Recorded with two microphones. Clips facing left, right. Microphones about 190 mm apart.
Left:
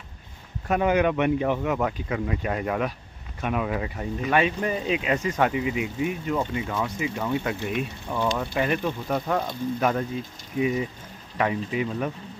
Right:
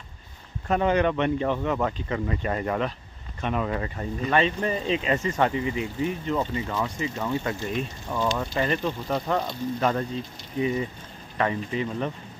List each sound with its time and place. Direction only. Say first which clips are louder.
0.7 s speech: left 1 dB; 5° left (ahead or behind)